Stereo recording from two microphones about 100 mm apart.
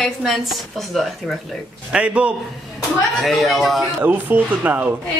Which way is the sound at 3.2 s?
Centre (ahead or behind).